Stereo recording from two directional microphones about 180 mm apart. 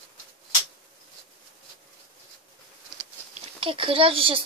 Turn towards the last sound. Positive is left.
turn(degrees=-30)  # may be behind; listen again after turning